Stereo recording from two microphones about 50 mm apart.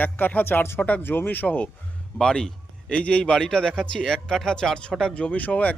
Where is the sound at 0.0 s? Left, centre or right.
Left.